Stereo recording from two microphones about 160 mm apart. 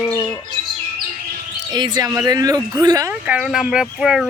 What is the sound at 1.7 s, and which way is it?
Speech, 25° right (ahead or behind).